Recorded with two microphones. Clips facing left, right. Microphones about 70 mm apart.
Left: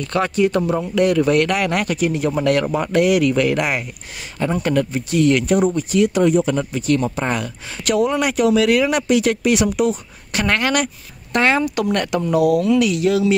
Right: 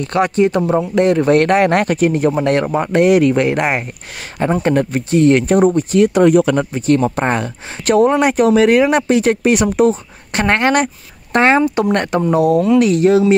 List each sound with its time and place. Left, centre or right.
0.0 s speech: right
2.4 s speech: right
6.3 s speech: right
6.7 s speech: right